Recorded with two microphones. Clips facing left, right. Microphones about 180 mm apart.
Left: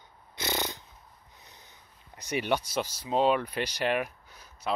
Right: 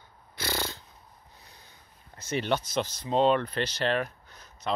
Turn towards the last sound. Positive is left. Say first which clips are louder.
# even
turn(degrees=10)  # may be behind; listen again after turning